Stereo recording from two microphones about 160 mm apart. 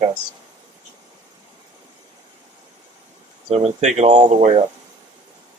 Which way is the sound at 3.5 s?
45° right (ahead or behind).